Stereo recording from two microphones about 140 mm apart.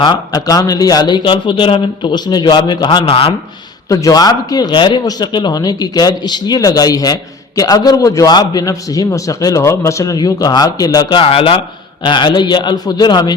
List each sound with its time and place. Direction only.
0.0 s a man's voice: 30° left (ahead or behind)
3.8 s a man's voice: 25° left (ahead or behind)